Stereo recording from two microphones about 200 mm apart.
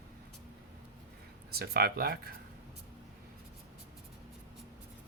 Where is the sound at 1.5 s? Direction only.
50° right (ahead or behind).